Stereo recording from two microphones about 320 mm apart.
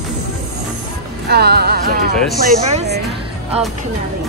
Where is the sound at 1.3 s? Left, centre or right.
Right.